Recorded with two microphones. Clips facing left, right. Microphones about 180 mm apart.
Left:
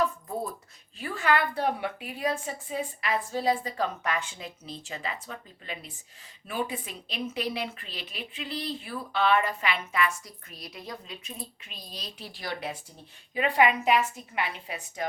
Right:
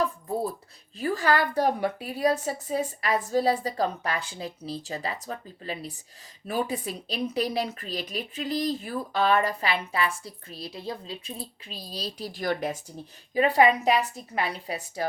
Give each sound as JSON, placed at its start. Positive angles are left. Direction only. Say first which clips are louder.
{"t": 0.9, "sound": "a woman's voice", "louder": "right 3 dB", "side_deg": -40}